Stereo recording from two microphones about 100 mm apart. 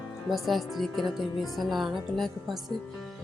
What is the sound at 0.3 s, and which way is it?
A woman's voice, centre (ahead or behind).